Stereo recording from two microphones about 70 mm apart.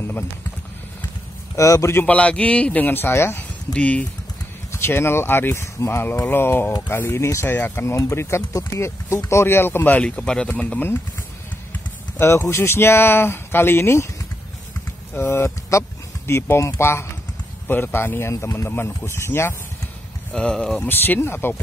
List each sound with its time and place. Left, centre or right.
1.6 s speech: left
2.0 s a man's voice: centre; by 3.4 s left
3.7 s a man's voice: centre
4.7 s a man's voice: left; by 10.5 s centre
10.5 s a man's voice: left
15.1 s speech: left
20.3 s speech: centre
20.8 s speech: left